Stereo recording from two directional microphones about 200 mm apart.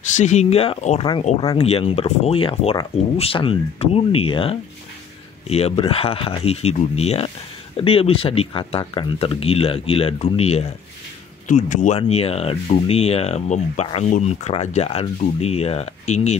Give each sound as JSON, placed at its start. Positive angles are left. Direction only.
{"t": 0.1, "sound": "speech", "side_deg": 35}